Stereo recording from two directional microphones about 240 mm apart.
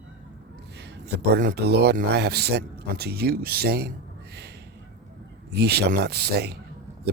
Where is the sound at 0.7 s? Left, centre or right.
Right.